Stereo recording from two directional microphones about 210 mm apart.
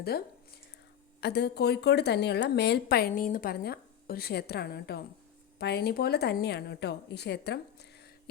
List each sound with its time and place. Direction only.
1.2 s a woman's voice: 50° left (ahead or behind)